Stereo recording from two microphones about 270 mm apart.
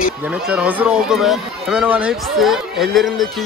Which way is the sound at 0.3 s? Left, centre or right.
Centre.